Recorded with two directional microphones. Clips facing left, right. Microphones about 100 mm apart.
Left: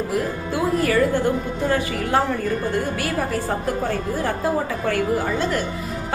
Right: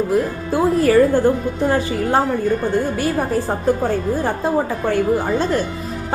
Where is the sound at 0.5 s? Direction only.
35° right (ahead or behind).